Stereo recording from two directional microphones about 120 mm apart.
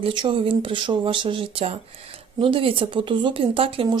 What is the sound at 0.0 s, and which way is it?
Speech, 45° right (ahead or behind).